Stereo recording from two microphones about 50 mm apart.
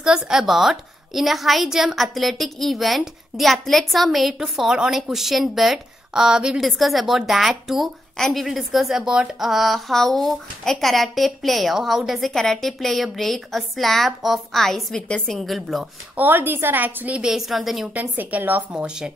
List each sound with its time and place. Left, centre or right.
0.0 s speech: centre
6.6 s speech: centre
9.4 s speech: centre
15.0 s a woman's voice: left
15.2 s speech: centre
16.2 s a woman's voice: right
17.2 s speech: centre
17.9 s a woman's voice: right
18.7 s speech: centre